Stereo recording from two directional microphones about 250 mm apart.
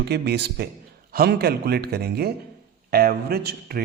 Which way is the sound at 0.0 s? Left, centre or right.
Right.